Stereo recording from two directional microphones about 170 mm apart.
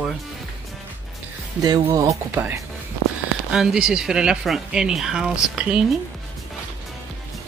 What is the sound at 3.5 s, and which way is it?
Speech, 5° right (ahead or behind).